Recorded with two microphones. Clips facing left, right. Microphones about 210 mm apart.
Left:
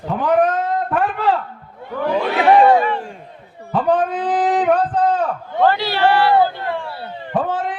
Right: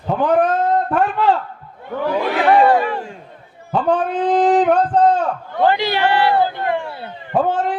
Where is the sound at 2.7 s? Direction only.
Centre (ahead or behind).